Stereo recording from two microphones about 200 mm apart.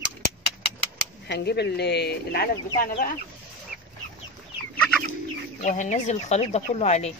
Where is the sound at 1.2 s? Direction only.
55° left (ahead or behind).